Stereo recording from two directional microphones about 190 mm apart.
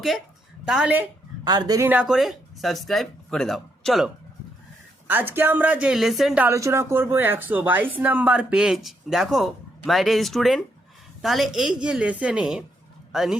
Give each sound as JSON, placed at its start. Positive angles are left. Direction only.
{"t": 0.6, "sound": "a woman's voice", "side_deg": -5}
{"t": 1.5, "sound": "speech", "side_deg": -20}
{"t": 5.0, "sound": "speech", "side_deg": -10}